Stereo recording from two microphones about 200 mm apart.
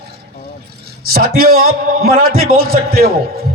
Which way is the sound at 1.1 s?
50° right (ahead or behind).